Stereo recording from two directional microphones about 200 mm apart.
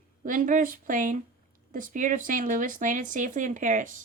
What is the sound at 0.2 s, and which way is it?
Speech, 40° right (ahead or behind).